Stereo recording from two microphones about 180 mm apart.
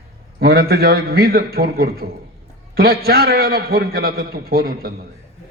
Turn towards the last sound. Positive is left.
turn(degrees=-55)  # may be behind; listen again after turning